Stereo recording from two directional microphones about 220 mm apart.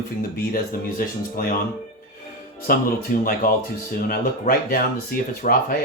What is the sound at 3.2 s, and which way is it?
Speech, 40° left (ahead or behind).